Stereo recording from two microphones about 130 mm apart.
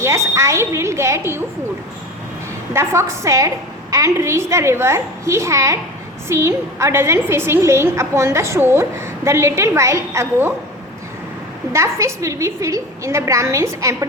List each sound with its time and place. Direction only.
0.0 s a woman's voice: 20° right (ahead or behind)
2.7 s a woman's voice: 20° right (ahead or behind)
11.7 s a woman's voice: 20° right (ahead or behind)